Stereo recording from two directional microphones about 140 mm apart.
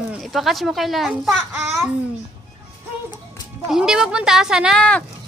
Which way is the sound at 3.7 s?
5° right (ahead or behind).